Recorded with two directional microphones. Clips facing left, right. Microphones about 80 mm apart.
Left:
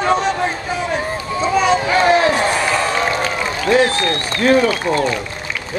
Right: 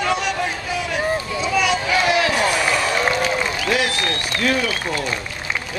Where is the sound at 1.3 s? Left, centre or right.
Left.